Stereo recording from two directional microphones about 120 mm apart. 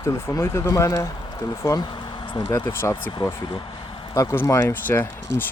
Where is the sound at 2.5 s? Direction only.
20° left (ahead or behind).